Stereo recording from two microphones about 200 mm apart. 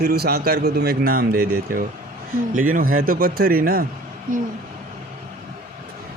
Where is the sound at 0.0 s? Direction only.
50° right (ahead or behind).